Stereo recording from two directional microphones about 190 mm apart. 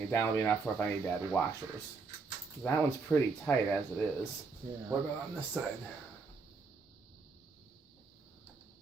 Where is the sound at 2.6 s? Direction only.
5° left (ahead or behind).